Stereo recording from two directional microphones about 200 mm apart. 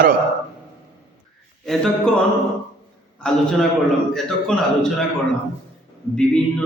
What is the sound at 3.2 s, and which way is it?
A man's voice, 5° left (ahead or behind).